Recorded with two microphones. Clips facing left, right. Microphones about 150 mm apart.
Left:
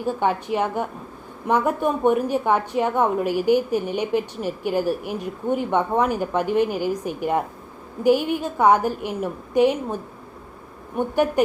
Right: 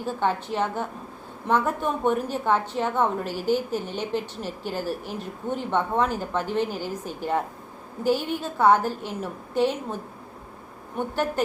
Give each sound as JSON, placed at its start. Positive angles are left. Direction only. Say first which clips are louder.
{"t": 0.0, "sound": "a woman's voice", "louder": "left 3 dB", "side_deg": 15}